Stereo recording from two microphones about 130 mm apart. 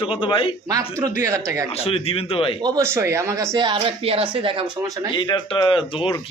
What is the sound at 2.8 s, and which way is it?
Speech, 20° right (ahead or behind).